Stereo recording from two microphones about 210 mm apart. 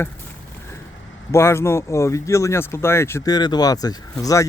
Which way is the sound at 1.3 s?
10° left (ahead or behind).